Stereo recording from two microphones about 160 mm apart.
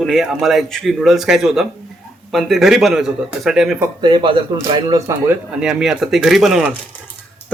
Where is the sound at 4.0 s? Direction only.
30° right (ahead or behind).